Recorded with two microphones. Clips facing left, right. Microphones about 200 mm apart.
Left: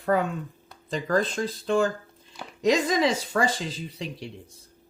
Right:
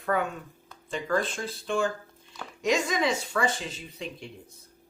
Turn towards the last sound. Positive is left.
turn(degrees=35)  # may be behind; listen again after turning